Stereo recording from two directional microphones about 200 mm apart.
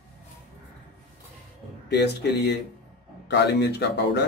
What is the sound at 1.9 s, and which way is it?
Speech, 55° left (ahead or behind).